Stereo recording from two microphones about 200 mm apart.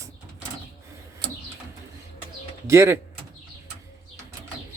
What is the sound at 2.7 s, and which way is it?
Speech, 15° right (ahead or behind).